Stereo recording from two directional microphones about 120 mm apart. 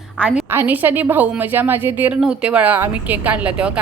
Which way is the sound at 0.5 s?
15° right (ahead or behind).